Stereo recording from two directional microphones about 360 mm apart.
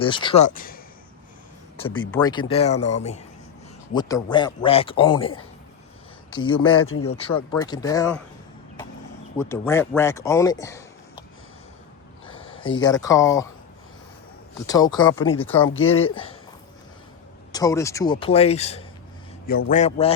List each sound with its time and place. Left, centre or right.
0.0 s speech: centre
2.1 s speech: centre
6.3 s speech: centre
6.8 s speech: left
7.2 s speech: centre
9.4 s speech: centre
12.8 s speech: centre
14.7 s speech: centre
15.7 s speech: left
16.0 s speech: centre
17.5 s a man's voice: centre